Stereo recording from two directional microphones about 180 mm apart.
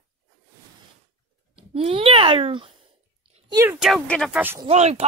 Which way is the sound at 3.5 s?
15° right (ahead or behind).